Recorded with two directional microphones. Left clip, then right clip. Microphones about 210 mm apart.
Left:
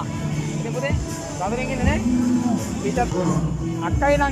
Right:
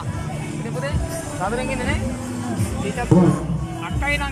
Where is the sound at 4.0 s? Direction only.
20° left (ahead or behind).